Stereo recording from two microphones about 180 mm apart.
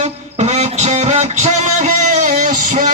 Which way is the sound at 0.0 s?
40° right (ahead or behind).